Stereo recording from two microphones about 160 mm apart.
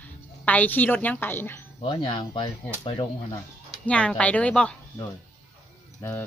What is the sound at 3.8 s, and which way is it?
Speech, 5° left (ahead or behind).